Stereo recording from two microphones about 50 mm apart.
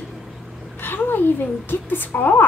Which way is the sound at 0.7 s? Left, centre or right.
Left.